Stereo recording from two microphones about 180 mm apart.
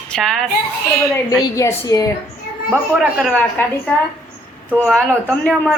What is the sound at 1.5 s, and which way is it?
Speech, 15° left (ahead or behind).